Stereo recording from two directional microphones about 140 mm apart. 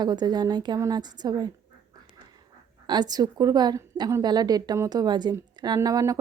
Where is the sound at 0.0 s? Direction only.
30° right (ahead or behind).